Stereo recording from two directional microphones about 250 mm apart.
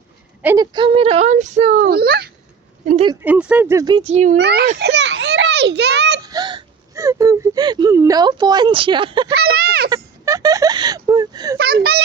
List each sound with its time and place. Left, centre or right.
0.4 s a child's voice: centre; by 2.3 s right
2.8 s a child's voice: right
3.2 s speech: centre; by 4.4 s right
4.4 s a child's voice: right
4.8 s children playing: right
6.2 s speech: centre
9.2 s a sound: right
9.9 s speech: centre
11.5 s a child's voice: right